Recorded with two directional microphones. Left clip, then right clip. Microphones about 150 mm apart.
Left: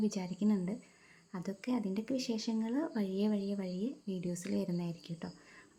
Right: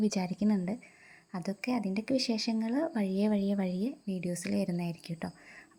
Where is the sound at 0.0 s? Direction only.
35° right (ahead or behind).